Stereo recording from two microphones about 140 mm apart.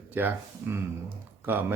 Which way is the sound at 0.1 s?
15° right (ahead or behind).